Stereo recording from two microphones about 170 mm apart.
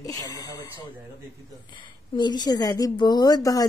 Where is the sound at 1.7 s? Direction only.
25° left (ahead or behind).